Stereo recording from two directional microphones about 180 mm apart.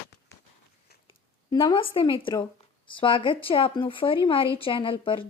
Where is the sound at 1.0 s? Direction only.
25° left (ahead or behind).